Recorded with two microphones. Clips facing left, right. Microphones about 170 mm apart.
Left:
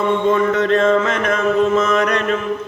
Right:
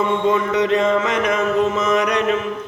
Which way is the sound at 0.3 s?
15° right (ahead or behind).